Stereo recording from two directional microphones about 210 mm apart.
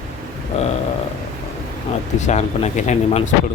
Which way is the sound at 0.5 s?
30° left (ahead or behind).